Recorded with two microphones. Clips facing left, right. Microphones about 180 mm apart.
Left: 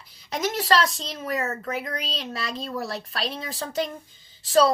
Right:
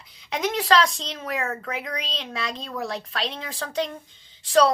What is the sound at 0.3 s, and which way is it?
Speech, centre (ahead or behind).